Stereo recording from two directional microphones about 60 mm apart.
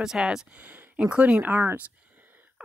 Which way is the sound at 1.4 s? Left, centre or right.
Right.